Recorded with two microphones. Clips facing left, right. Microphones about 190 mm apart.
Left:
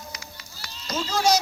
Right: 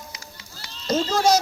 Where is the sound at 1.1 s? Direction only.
50° right (ahead or behind).